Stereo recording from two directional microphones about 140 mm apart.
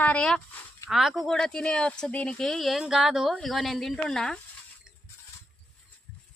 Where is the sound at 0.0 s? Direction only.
10° left (ahead or behind).